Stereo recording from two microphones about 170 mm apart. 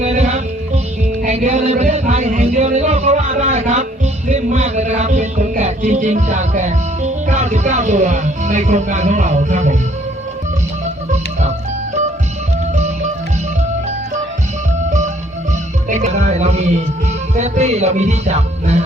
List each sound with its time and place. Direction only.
0.0 s music: 45° right (ahead or behind)
11.1 s organ: 45° right (ahead or behind)
14.8 s music: 45° right (ahead or behind)